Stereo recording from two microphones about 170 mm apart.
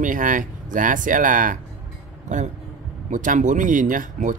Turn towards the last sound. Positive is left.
turn(degrees=-50)  # may be behind; listen again after turning